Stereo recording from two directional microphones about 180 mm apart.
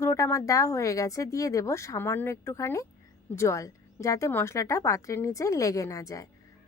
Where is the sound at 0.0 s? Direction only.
15° left (ahead or behind).